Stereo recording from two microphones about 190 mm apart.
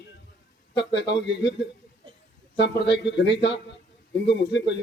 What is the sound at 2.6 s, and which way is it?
Speech, 65° left (ahead or behind).